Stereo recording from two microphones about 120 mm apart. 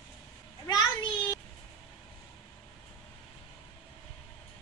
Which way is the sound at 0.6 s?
40° left (ahead or behind).